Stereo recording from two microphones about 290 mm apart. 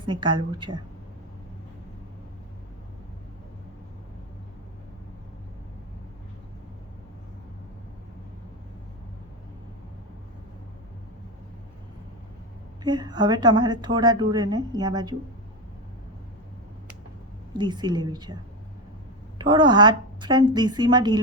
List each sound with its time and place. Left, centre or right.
0.0 s a woman's voice: centre
12.8 s a woman's voice: centre
17.6 s a woman's voice: centre
19.4 s a woman's voice: centre